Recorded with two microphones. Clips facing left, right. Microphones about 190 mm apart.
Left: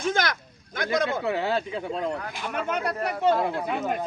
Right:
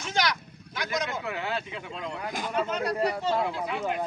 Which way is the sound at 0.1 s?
50° left (ahead or behind).